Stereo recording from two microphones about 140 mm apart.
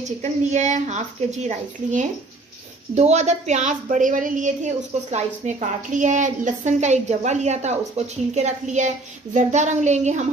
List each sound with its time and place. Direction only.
0.0 s a woman's voice: 55° right (ahead or behind)